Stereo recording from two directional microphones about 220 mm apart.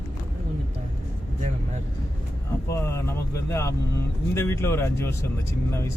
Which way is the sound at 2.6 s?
15° left (ahead or behind).